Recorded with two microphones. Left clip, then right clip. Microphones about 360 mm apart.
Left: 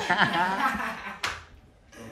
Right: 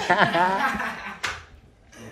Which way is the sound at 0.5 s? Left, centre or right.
Left.